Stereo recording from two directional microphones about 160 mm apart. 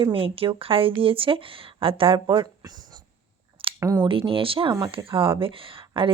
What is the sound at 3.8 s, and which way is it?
Speech, 20° right (ahead or behind).